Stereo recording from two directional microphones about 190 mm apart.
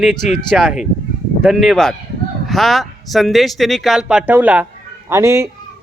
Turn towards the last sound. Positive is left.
turn(degrees=-15)  # may be behind; listen again after turning